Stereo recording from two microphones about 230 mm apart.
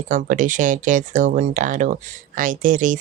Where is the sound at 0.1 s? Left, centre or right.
Right.